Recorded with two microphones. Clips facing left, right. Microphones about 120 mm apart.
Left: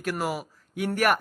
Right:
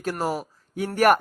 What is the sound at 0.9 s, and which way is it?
Speech, 40° right (ahead or behind).